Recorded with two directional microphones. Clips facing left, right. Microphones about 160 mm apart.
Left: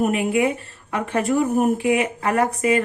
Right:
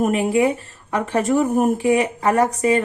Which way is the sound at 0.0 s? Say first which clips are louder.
Right 2 dB; 35° right (ahead or behind).